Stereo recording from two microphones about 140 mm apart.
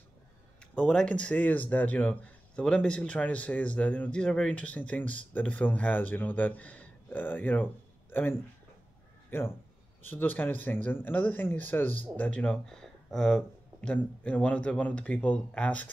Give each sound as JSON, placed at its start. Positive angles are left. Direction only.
{"t": 0.7, "sound": "speech", "side_deg": 5}